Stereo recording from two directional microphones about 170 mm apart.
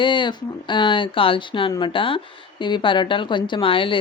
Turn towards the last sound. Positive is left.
turn(degrees=30)  # may be behind; listen again after turning